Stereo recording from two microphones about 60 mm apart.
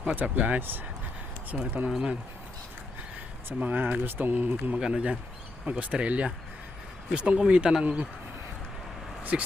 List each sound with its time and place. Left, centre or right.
0.2 s speech: right
1.9 s speech: centre
3.6 s speech: right
4.8 s speech: centre
9.3 s speech: centre